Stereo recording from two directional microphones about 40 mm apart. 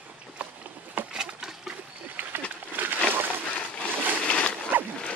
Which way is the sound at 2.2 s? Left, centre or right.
Right.